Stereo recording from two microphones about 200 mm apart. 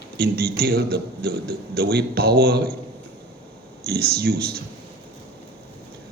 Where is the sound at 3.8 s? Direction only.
50° right (ahead or behind).